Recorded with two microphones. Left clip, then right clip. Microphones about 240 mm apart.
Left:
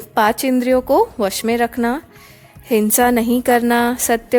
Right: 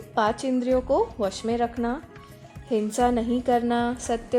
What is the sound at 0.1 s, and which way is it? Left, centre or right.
A woman's voice, left.